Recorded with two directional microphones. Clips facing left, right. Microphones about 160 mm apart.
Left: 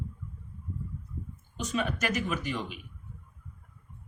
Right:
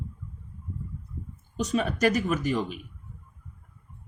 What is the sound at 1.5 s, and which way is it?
Speech, 35° right (ahead or behind).